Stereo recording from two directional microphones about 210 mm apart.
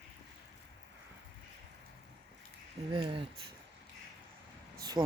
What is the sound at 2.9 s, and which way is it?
Speech, 20° right (ahead or behind).